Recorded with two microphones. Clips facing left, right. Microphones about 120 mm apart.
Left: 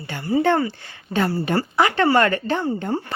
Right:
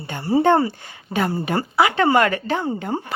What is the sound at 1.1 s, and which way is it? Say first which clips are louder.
A woman's voice: left 1 dB; 15° right (ahead or behind).